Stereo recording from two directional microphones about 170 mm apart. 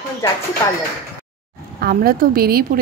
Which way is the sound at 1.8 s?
60° right (ahead or behind).